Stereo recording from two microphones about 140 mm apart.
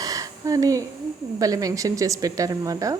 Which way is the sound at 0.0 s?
25° right (ahead or behind).